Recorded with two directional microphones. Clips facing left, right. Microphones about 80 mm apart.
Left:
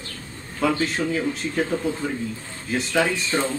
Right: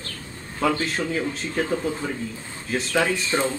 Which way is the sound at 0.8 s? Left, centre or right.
Centre.